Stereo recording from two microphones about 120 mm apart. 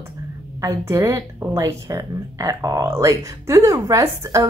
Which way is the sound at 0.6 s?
25° right (ahead or behind).